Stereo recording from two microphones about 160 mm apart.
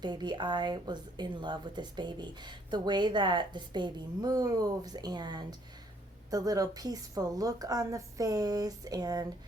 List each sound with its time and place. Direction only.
0.0 s a woman's voice: 25° right (ahead or behind)